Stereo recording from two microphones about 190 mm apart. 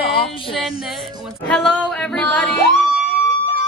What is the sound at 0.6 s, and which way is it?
Speech, centre (ahead or behind).